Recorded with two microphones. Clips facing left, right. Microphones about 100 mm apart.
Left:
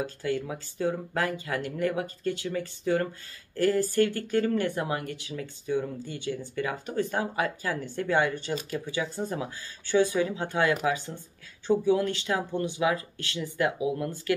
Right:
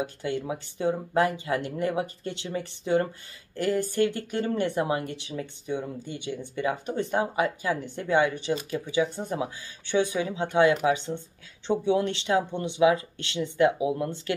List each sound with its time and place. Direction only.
0.0 s speech: 20° right (ahead or behind)